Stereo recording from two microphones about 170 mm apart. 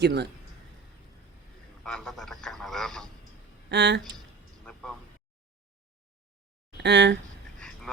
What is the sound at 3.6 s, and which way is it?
Speech, 90° right.